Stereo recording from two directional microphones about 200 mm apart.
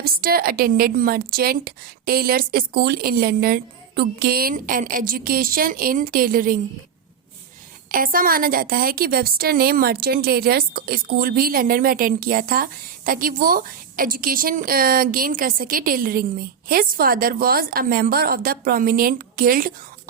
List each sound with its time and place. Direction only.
0.0 s a woman's voice: 50° right (ahead or behind)
7.9 s a woman's voice: 45° right (ahead or behind)